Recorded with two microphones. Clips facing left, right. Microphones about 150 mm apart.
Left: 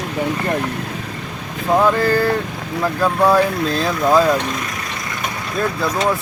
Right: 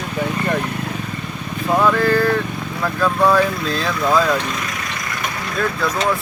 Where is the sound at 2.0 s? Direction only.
35° left (ahead or behind).